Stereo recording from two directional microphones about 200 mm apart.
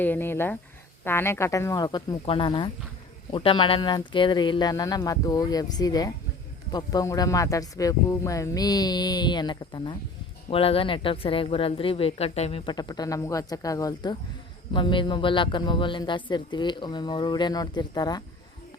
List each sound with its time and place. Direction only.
0.0 s speech: 10° left (ahead or behind)